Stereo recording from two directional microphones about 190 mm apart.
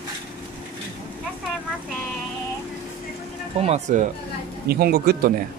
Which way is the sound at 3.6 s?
40° right (ahead or behind).